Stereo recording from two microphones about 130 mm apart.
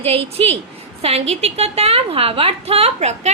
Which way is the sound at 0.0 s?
50° right (ahead or behind).